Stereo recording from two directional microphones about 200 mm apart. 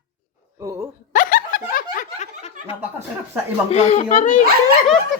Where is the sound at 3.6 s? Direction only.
30° left (ahead or behind).